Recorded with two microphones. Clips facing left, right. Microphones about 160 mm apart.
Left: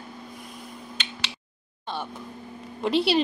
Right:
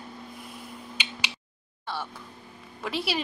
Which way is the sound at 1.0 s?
10° right (ahead or behind).